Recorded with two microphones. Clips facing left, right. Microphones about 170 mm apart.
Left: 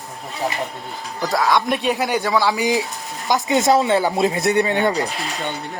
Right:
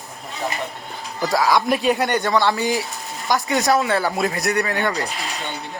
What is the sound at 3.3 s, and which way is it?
Speech, 20° left (ahead or behind).